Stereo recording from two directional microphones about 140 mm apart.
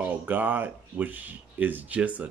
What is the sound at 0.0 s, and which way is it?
Speech, 15° right (ahead or behind).